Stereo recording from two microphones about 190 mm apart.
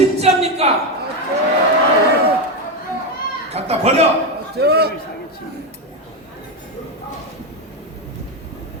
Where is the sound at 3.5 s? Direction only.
35° right (ahead or behind).